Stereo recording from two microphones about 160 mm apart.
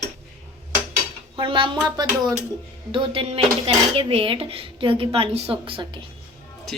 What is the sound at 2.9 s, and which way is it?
Speech, 35° right (ahead or behind).